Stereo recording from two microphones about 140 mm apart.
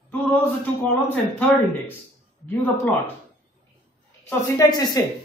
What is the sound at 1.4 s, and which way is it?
Speech, 15° left (ahead or behind).